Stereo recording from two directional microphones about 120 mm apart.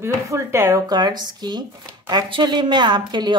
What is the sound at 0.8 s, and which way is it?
A woman's voice, 35° right (ahead or behind).